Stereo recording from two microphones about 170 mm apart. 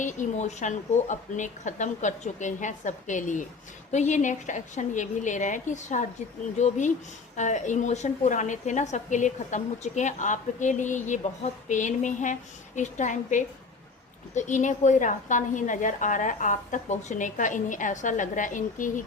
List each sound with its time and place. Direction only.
0.0 s a woman's voice: 45° left (ahead or behind)